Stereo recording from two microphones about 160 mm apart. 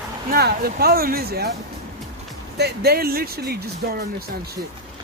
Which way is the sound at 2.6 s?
85° right.